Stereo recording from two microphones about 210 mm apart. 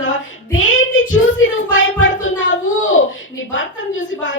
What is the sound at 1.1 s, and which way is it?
Speech, 65° left (ahead or behind).